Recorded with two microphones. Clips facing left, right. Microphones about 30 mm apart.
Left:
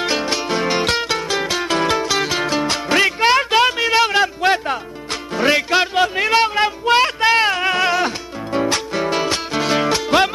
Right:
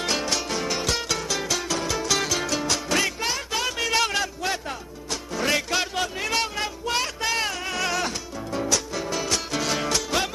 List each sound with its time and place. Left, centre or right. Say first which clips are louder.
0.0 s music: left 6 dB; left
2.0 s music: left 5 dB; left
3.7 s music: left 8 dB; left
4.4 s music: left 11 dB; left